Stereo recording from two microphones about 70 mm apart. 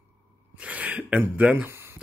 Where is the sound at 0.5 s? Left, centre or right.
Centre.